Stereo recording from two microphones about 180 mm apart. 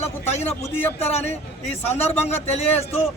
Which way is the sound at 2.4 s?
35° left (ahead or behind).